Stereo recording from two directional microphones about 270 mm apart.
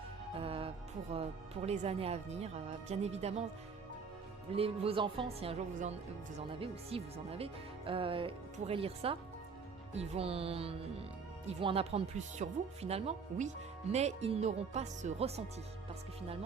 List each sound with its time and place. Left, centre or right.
0.3 s music: centre
1.6 s speech: right
4.5 s speech: right